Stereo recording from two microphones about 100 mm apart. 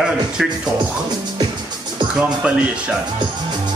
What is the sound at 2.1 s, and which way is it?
Speech, 10° right (ahead or behind).